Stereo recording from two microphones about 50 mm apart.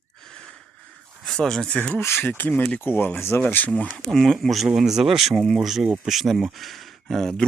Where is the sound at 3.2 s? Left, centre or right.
Left.